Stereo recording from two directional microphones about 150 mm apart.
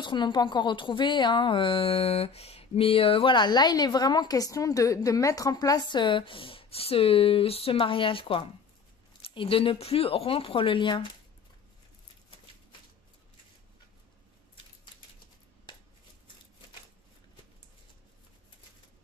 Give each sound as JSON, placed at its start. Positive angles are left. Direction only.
{"t": 0.0, "sound": "a woman's voice", "side_deg": 30}